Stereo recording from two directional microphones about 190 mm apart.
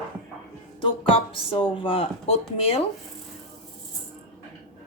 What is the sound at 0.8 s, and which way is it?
Speech, 25° left (ahead or behind).